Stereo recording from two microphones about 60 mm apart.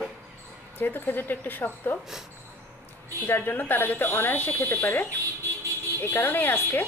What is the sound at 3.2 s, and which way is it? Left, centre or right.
Speech, left.